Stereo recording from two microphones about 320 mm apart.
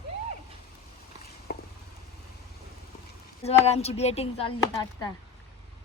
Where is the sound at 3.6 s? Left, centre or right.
Centre.